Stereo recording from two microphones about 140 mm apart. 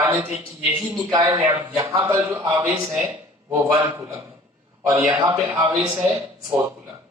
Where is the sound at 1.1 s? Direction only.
30° right (ahead or behind).